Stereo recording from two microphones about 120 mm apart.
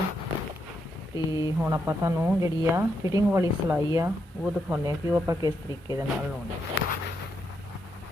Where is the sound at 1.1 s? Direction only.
30° right (ahead or behind).